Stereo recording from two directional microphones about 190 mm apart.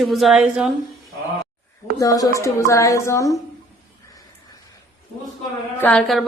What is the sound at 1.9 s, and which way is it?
A woman's voice, 20° left (ahead or behind).